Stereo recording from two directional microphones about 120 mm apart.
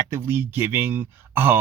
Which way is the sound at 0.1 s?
20° right (ahead or behind).